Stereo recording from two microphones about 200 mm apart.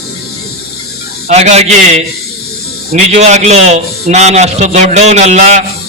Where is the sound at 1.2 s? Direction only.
35° right (ahead or behind).